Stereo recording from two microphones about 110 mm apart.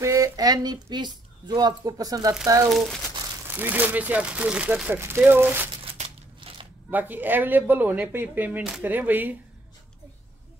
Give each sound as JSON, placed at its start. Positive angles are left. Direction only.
{"t": 0.0, "sound": "a woman's voice", "side_deg": -30}
{"t": 3.4, "sound": "speech", "side_deg": -15}
{"t": 5.9, "sound": "crumpling", "side_deg": -60}
{"t": 6.9, "sound": "speech", "side_deg": -15}